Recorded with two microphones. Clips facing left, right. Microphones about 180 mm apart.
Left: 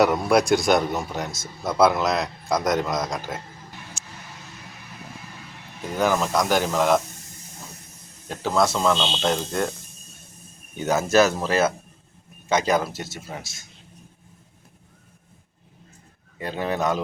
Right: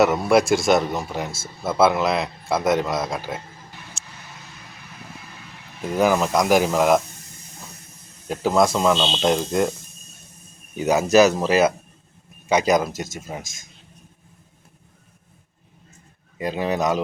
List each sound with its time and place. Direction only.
0.0 s a man's voice: centre (ahead or behind)
5.8 s speech: 5° right (ahead or behind)
8.3 s speech: 10° right (ahead or behind)
10.8 s speech: 10° right (ahead or behind)
16.4 s speech: 10° right (ahead or behind)